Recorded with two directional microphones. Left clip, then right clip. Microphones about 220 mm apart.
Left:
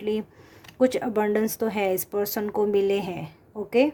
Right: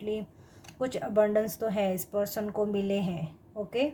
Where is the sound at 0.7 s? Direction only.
50° left (ahead or behind).